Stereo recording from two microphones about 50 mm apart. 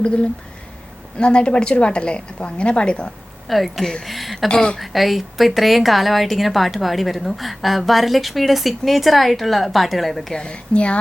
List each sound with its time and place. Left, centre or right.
1.2 s a woman's voice: left
3.4 s a woman's voice: centre
4.4 s speech: centre
4.8 s a woman's voice: centre
10.3 s a woman's voice: left